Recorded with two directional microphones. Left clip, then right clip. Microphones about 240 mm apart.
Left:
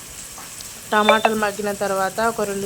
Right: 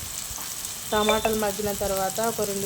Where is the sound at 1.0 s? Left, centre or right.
Centre.